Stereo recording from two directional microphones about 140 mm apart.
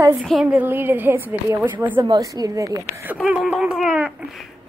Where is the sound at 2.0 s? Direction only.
25° right (ahead or behind).